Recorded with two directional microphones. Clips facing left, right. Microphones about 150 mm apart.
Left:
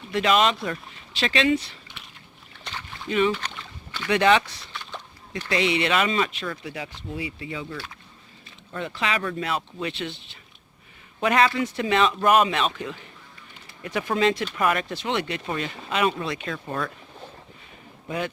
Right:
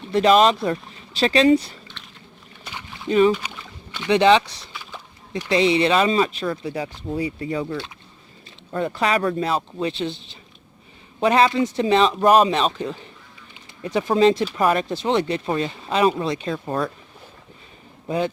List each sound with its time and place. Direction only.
0.1 s speech: 35° right (ahead or behind)
2.0 s boat: 10° left (ahead or behind)
2.6 s a sound: 10° right (ahead or behind)
3.1 s speech: 35° right (ahead or behind)
3.3 s boat: 10° right (ahead or behind); by 4.4 s 25° right (ahead or behind)
4.7 s a sound: 5° right (ahead or behind)
5.5 s speech: 30° right (ahead or behind)
11.2 s speech: 30° right (ahead or behind)